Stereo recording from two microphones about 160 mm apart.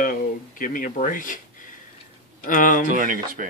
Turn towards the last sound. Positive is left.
turn(degrees=-60)  # may be behind; listen again after turning